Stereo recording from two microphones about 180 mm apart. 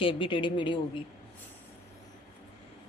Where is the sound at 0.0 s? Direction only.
30° left (ahead or behind).